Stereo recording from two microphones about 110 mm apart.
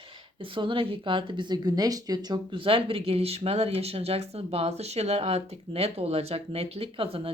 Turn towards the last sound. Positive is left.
turn(degrees=-55)  # may be behind; listen again after turning